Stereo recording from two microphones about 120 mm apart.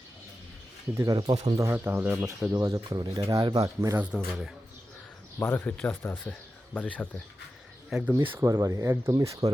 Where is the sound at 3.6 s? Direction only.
25° right (ahead or behind).